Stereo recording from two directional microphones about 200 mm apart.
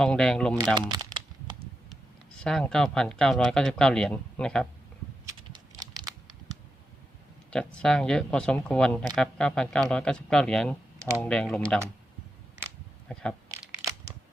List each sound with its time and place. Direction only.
0.0 s speech: 5° left (ahead or behind)
0.8 s crumpling: 25° right (ahead or behind)
2.4 s speech: 5° left (ahead or behind)
5.5 s a sound: 20° right (ahead or behind)
7.5 s speech: 5° left (ahead or behind)
13.1 s a sound: 5° left (ahead or behind)